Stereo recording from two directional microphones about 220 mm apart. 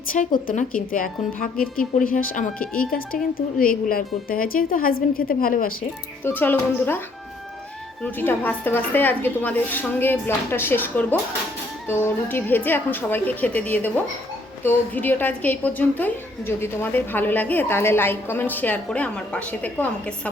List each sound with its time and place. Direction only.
0.1 s a woman's voice: 35° left (ahead or behind)
6.2 s a woman's voice: 10° left (ahead or behind)
8.0 s a woman's voice: 10° left (ahead or behind)